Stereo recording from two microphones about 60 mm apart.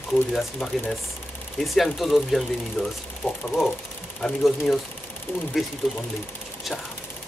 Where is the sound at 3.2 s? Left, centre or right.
Left.